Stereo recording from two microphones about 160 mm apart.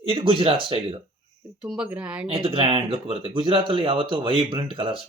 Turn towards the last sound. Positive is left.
turn(degrees=-30)  # may be behind; listen again after turning